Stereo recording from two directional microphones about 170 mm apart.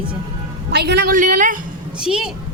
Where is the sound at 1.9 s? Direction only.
5° right (ahead or behind).